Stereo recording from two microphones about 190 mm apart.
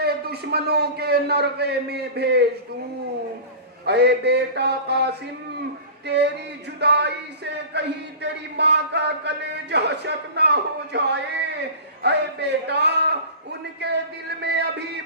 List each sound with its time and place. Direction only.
0.0 s a man's voice: 55° right (ahead or behind)
3.8 s a man's voice: 60° right (ahead or behind)
12.0 s a man's voice: 60° right (ahead or behind)